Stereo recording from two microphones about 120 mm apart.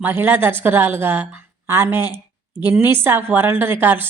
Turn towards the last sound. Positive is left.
turn(degrees=-15)  # may be behind; listen again after turning